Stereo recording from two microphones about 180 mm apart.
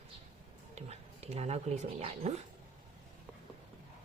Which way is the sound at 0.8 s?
35° right (ahead or behind).